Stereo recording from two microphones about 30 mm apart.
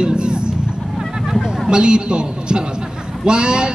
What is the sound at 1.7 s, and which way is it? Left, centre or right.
Speech, right.